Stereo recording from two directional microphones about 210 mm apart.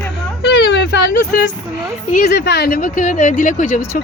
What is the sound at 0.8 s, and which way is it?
Speech, 45° left (ahead or behind).